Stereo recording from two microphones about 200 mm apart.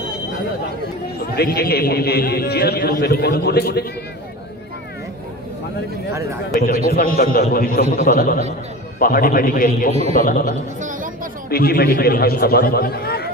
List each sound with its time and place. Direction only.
1.3 s a man's voice: 50° left (ahead or behind)
6.5 s a man's voice: 45° left (ahead or behind)
10.8 s chatter: 40° right (ahead or behind)
11.5 s a man's voice: 50° left (ahead or behind)